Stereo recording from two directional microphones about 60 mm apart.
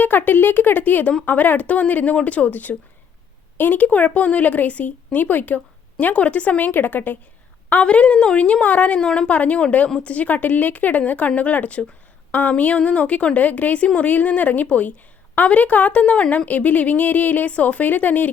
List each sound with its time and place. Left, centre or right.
0.0 s speech: left